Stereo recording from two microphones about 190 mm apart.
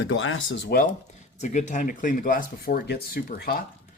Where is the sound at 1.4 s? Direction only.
40° left (ahead or behind).